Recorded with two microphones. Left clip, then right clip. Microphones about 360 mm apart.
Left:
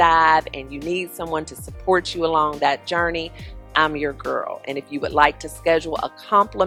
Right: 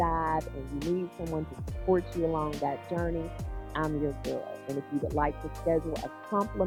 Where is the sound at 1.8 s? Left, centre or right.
Centre.